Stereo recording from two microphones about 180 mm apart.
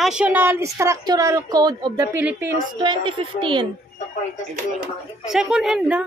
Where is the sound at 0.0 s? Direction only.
5° right (ahead or behind); by 2.0 s 25° right (ahead or behind).